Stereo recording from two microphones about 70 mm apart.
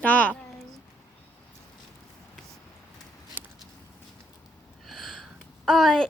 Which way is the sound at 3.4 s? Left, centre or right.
Right.